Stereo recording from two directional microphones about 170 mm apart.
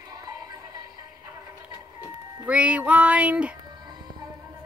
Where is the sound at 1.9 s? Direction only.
10° right (ahead or behind).